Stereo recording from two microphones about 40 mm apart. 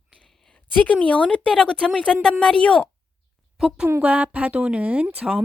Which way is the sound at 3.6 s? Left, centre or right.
Centre.